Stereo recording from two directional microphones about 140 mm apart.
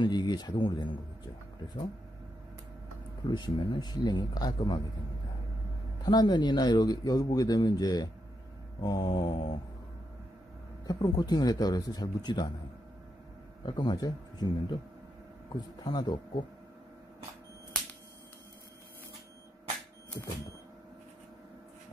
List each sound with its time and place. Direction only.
0.0 s speech: 30° left (ahead or behind)
3.3 s speech: 35° left (ahead or behind)
6.0 s speech: 30° left (ahead or behind)
10.9 s speech: 30° left (ahead or behind)
13.7 s speech: 30° left (ahead or behind)